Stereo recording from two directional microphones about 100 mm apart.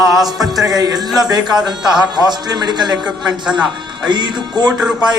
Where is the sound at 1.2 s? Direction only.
40° right (ahead or behind).